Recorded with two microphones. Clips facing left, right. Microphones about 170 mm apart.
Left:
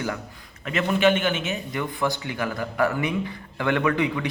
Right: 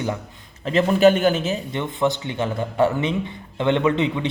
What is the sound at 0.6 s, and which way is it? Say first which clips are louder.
A man's voice: right 5 dB; 35° right (ahead or behind).